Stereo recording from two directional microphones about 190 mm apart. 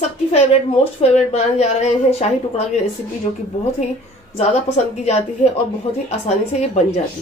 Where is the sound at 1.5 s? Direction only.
35° left (ahead or behind).